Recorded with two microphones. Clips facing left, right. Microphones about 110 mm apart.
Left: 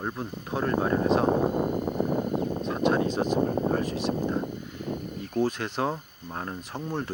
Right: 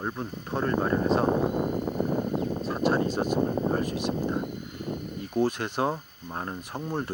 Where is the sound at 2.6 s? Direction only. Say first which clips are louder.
Left 1 dB; centre (ahead or behind).